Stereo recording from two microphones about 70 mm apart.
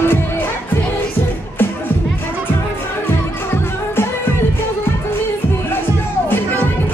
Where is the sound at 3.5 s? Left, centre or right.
Left.